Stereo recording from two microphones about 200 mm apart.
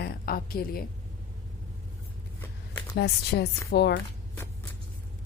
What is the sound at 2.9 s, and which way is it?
Speech, 55° left (ahead or behind).